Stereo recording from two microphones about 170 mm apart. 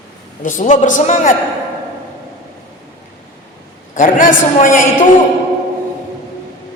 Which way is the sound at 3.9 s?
50° left (ahead or behind).